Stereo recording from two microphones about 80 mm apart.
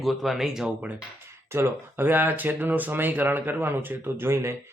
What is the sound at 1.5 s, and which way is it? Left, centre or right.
Speech, right.